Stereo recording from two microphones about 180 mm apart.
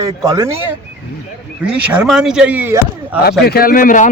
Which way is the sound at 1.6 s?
5° right (ahead or behind).